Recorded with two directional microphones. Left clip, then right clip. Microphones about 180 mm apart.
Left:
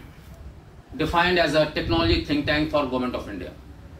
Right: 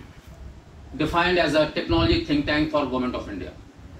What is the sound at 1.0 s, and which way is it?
Speech, 45° left (ahead or behind).